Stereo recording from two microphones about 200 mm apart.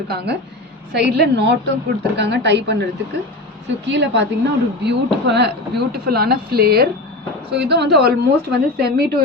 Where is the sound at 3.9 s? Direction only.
60° right (ahead or behind).